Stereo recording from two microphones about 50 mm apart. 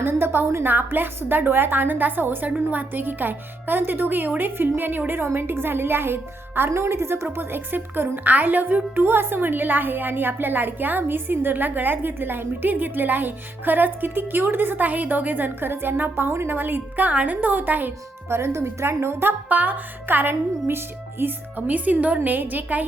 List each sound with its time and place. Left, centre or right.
0.0 s a woman's voice: right
0.4 s speech: right
0.7 s a woman's voice: right
6.7 s speech: right
7.3 s speech: right
16.6 s speech: right
18.3 s speech: right
19.5 s speech: right
21.5 s speech: right